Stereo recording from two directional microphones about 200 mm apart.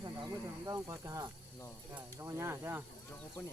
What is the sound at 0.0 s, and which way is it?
Snake, 20° right (ahead or behind).